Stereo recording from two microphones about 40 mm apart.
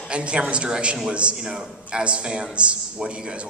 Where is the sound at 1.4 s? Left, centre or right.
Centre.